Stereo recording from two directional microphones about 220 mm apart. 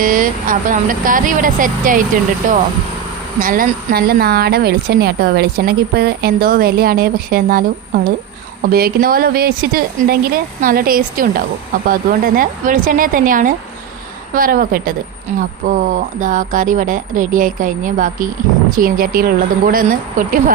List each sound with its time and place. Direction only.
0.0 s speech: 40° right (ahead or behind)